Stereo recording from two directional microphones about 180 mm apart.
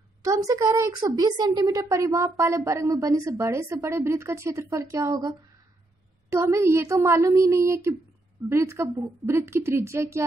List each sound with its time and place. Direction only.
0.2 s a woman's voice: 20° right (ahead or behind)
6.3 s a woman's voice: 15° right (ahead or behind)